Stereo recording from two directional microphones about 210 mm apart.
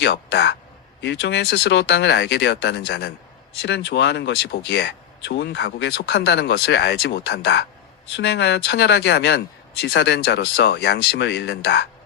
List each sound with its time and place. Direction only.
0.0 s speech: 55° left (ahead or behind)